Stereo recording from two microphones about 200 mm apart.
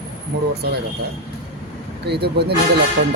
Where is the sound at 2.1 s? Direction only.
55° right (ahead or behind).